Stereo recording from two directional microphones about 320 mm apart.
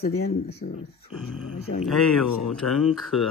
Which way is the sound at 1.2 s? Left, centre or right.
Centre.